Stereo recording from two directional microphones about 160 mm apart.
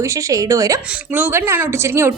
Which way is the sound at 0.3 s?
20° right (ahead or behind).